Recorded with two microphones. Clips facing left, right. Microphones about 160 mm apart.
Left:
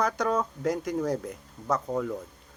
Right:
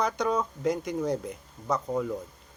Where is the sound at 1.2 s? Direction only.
10° right (ahead or behind).